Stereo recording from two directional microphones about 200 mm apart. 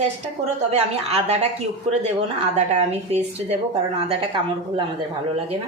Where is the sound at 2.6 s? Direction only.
30° right (ahead or behind).